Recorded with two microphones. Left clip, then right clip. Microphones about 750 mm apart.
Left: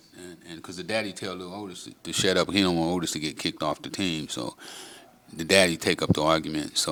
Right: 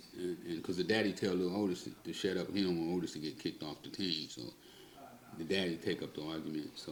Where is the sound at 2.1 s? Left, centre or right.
Left.